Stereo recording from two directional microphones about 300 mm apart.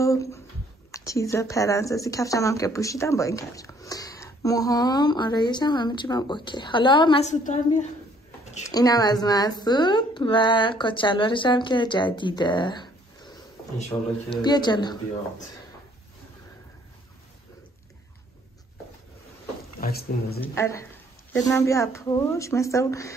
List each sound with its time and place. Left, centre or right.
0.0 s speech: centre
8.6 s speech: centre
19.8 s speech: left
20.3 s speech: centre